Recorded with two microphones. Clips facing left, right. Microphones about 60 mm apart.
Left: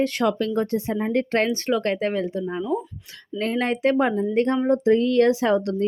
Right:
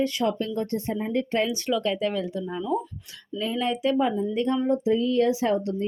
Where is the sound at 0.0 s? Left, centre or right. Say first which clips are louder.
Left 3 dB; left.